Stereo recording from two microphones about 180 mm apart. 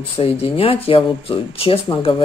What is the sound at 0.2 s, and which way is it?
Speech, 30° left (ahead or behind).